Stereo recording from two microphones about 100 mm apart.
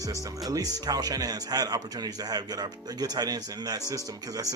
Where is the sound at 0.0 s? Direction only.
35° right (ahead or behind).